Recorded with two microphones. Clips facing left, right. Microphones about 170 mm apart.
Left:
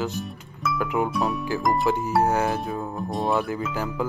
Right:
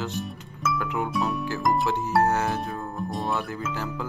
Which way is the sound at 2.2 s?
10° left (ahead or behind).